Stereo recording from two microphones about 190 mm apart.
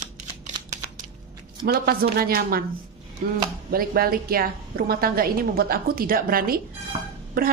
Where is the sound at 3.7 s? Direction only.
50° right (ahead or behind).